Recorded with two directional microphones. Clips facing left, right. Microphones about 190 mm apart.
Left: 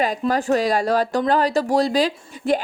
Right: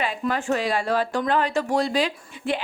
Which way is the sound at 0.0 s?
40° left (ahead or behind).